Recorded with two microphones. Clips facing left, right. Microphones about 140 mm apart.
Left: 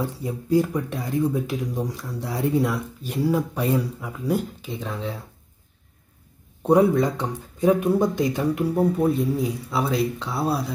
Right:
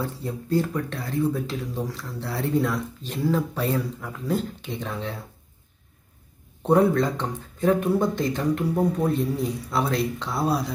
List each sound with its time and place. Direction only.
0.0 s speech: 10° left (ahead or behind)
6.6 s speech: 10° left (ahead or behind)